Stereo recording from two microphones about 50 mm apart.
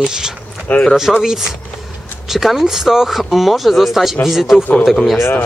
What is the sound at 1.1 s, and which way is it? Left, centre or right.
Speech, centre.